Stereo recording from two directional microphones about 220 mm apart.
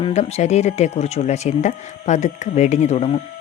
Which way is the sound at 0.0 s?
30° left (ahead or behind).